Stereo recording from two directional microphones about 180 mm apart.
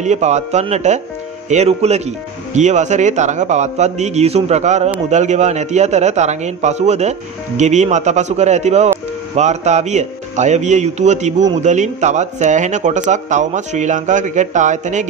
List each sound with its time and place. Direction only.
0.0 s a man's voice: 40° right (ahead or behind)